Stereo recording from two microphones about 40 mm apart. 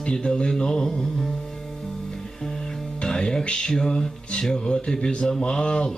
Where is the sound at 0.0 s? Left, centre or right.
Left.